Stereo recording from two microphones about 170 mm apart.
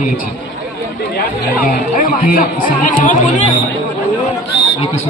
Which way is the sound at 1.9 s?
55° left (ahead or behind).